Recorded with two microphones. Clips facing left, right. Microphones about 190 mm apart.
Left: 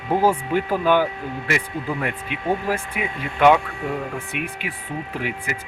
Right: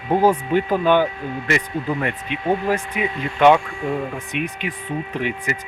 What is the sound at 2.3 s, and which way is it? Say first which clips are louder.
Speech: right 3 dB; 10° left (ahead or behind).